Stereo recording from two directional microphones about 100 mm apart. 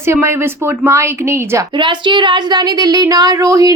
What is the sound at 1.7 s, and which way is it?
Speech, 50° right (ahead or behind).